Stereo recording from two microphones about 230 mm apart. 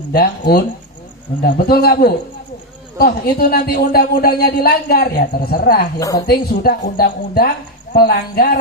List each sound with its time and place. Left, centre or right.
0.1 s speech: left
6.0 s a woman's voice: centre
6.2 s speech: left